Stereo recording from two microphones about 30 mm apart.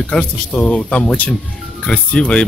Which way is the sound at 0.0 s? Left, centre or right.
Left.